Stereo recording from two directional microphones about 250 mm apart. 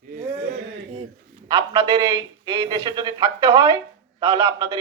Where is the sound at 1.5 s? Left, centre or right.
Centre.